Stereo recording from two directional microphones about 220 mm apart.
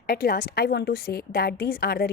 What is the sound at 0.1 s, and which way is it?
A woman's voice, 45° left (ahead or behind).